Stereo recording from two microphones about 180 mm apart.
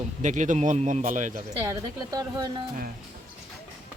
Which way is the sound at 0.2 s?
45° right (ahead or behind).